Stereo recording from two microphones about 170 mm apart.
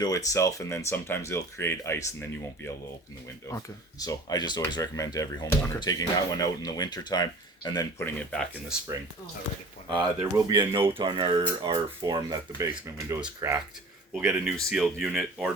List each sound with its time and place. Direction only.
0.0 s speech: 20° left (ahead or behind)
3.5 s speech: 20° left (ahead or behind)
8.7 s speech: 5° right (ahead or behind)
9.9 s speech: 25° right (ahead or behind)
14.4 s speech: centre (ahead or behind)